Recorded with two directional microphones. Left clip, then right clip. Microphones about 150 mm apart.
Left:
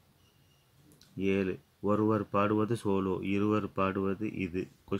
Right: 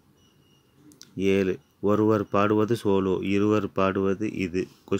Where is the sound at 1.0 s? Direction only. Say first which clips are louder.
Right 8 dB; 35° right (ahead or behind).